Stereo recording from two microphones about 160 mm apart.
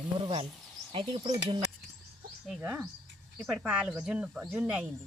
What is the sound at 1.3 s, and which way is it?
Speech, 25° right (ahead or behind).